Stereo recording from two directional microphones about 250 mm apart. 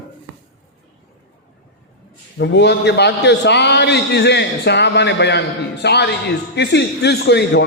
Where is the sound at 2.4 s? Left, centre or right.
Left.